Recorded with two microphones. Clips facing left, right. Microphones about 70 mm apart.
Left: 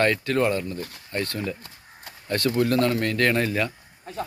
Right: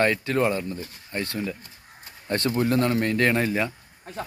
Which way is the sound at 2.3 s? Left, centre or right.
Right.